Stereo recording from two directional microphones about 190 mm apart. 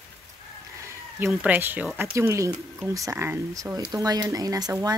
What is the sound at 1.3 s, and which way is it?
Speech, 5° right (ahead or behind).